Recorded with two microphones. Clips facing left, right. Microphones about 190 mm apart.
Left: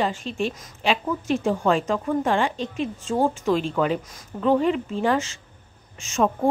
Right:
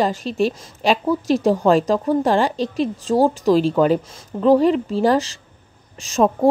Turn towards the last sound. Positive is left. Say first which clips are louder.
# right 5 dB
turn(degrees=-35)  # may be behind; listen again after turning